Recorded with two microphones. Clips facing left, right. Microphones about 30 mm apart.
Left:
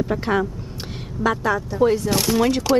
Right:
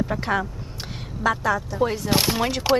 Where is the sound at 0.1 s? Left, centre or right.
Centre.